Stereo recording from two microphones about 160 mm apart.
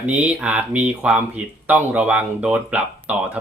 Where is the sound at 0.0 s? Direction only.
10° right (ahead or behind).